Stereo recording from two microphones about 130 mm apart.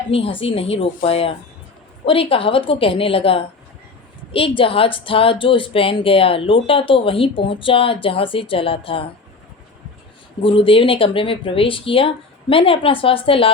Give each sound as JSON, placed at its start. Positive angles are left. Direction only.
{"t": 0.1, "sound": "speech", "side_deg": 45}
{"t": 10.4, "sound": "speech", "side_deg": 45}